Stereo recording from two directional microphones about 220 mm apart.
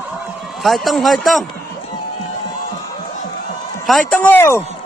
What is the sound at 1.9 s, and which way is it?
Crowd, 30° left (ahead or behind).